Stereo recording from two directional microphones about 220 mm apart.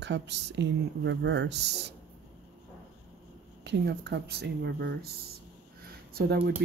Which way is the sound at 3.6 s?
50° right (ahead or behind).